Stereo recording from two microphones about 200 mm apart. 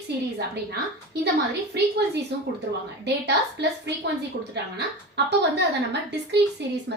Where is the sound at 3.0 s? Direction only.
60° right (ahead or behind).